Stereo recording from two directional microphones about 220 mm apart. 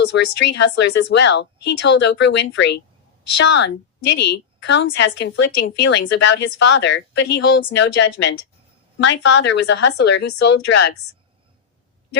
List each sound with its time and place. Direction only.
0.3 s a woman's voice: 50° left (ahead or behind)